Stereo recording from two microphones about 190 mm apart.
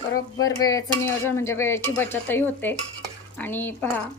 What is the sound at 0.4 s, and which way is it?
Speech, 20° left (ahead or behind).